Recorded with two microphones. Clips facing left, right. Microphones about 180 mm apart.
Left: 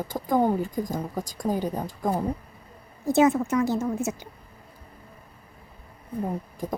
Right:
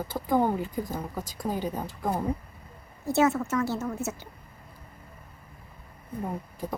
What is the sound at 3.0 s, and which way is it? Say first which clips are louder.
A woman's voice: left 4 dB; 15° left (ahead or behind).